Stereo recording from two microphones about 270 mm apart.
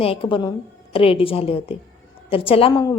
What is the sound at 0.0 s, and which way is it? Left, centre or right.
A woman's voice, centre.